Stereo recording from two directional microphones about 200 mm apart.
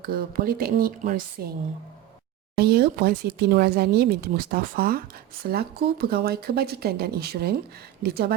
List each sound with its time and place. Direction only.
0.0 s speech: 45° right (ahead or behind)
2.6 s speech: 55° right (ahead or behind)